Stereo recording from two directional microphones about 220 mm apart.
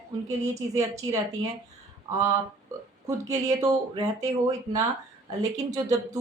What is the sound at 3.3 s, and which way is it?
Speech, 15° right (ahead or behind).